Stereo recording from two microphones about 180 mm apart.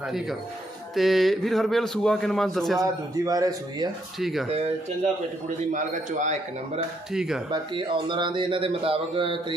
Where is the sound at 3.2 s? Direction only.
20° right (ahead or behind).